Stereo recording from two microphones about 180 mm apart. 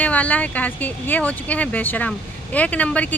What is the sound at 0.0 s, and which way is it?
Speech, 10° left (ahead or behind).